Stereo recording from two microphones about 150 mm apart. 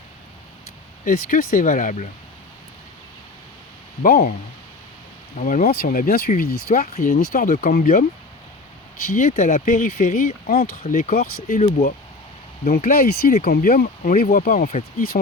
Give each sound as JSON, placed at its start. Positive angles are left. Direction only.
{"t": 1.0, "sound": "speech", "side_deg": 65}
{"t": 4.0, "sound": "speech", "side_deg": 75}
{"t": 5.4, "sound": "speech", "side_deg": 60}
{"t": 9.0, "sound": "speech", "side_deg": 60}
{"t": 12.7, "sound": "speech", "side_deg": 75}